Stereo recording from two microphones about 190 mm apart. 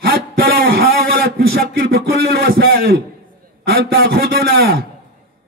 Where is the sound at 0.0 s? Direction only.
55° right (ahead or behind).